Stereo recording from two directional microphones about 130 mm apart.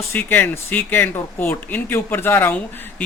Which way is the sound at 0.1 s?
10° left (ahead or behind).